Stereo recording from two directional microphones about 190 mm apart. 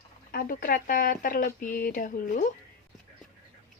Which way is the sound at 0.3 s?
50° left (ahead or behind).